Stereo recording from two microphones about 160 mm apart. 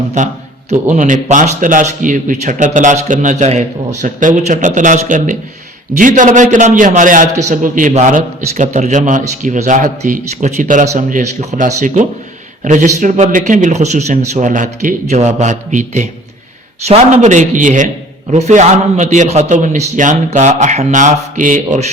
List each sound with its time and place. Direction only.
0.2 s a man's voice: 50° right (ahead or behind)